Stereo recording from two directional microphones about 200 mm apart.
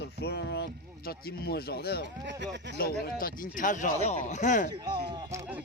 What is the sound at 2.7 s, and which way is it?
Speech, 50° left (ahead or behind).